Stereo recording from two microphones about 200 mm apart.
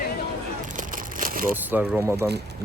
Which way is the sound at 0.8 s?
40° right (ahead or behind).